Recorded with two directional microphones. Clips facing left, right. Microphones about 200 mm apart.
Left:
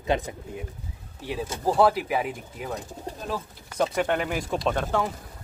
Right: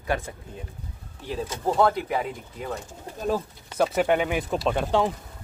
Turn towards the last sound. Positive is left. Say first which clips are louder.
# right 1 dB
turn(degrees=-5)  # may be behind; listen again after turning